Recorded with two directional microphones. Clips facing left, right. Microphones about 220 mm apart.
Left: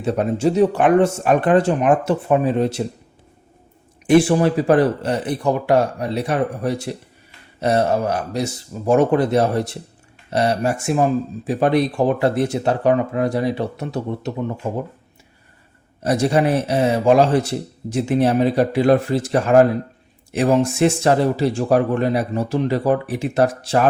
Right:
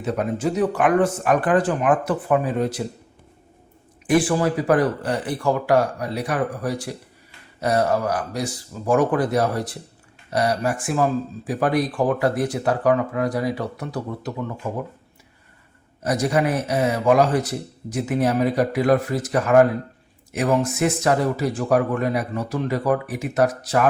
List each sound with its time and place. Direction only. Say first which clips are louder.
0.0 s speech: left 4 dB; 30° left (ahead or behind)
4.0 s speech: left 5 dB; 25° left (ahead or behind)
16.0 s speech: left 4 dB; 30° left (ahead or behind)